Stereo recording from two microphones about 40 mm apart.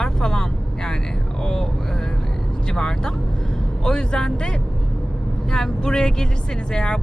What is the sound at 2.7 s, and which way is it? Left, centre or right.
Speech, centre.